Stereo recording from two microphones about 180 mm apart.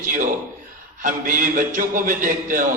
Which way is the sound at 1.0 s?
50° right (ahead or behind).